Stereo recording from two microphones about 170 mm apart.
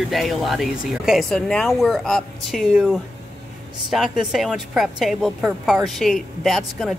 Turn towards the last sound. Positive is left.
turn(degrees=0)  # may be behind; listen again after turning